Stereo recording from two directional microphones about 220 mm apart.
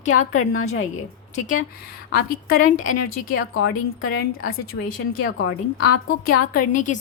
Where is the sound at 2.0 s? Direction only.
45° left (ahead or behind).